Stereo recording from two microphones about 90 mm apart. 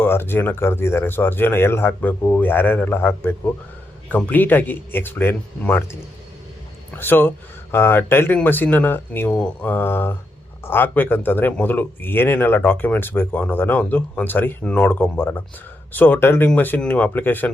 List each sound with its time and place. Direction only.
0.0 s speech: 25° left (ahead or behind)
6.9 s speech: 25° left (ahead or behind)